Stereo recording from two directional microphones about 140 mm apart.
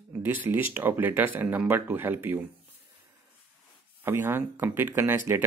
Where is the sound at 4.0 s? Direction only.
15° right (ahead or behind).